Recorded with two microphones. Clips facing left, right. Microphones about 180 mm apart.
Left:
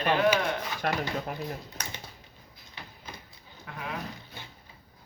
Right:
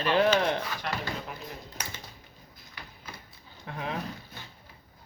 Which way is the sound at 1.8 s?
10° right (ahead or behind).